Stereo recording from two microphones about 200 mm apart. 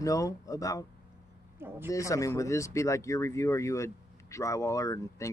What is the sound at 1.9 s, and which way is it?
Speech, 15° left (ahead or behind).